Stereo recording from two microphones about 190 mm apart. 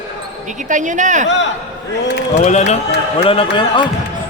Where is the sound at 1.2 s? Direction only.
70° left (ahead or behind).